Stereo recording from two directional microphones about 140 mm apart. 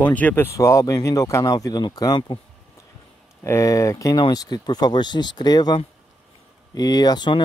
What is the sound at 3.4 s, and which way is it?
Speech, 20° left (ahead or behind).